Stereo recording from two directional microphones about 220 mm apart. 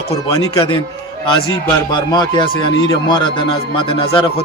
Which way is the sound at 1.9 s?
20° left (ahead or behind).